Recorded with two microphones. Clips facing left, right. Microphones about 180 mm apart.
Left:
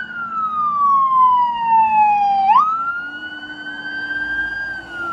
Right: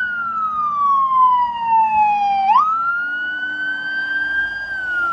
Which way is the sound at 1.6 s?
Centre (ahead or behind).